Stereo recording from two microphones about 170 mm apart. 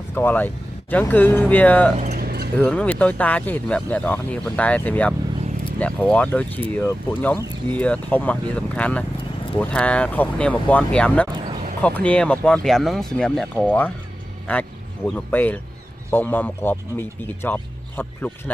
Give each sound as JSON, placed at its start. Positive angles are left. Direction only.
{"t": 0.1, "sound": "speech", "side_deg": 10}
{"t": 2.1, "sound": "a sound", "side_deg": -65}
{"t": 2.5, "sound": "speech", "side_deg": 5}